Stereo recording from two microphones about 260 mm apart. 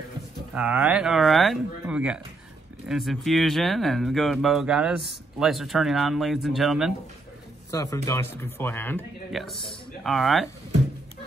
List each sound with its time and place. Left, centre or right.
0.6 s speech: centre
7.7 s speech: centre